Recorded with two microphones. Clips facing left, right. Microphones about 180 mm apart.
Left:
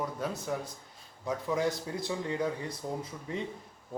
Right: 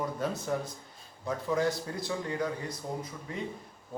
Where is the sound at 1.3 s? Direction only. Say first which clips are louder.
Right 1 dB; 20° left (ahead or behind).